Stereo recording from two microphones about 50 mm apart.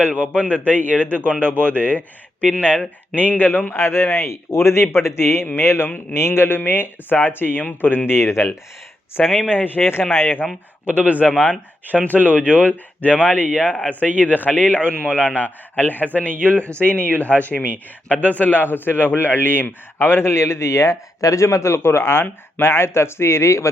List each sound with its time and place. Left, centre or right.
0.2 s speech: right
0.9 s speech: left
3.2 s a man's voice: left
3.8 s a man's voice: left
6.6 s a man's voice: left
9.4 s a man's voice: left
10.8 s speech: right
12.2 s a man's voice: left